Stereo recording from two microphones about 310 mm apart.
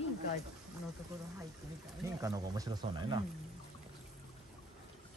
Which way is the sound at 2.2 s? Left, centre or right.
Centre.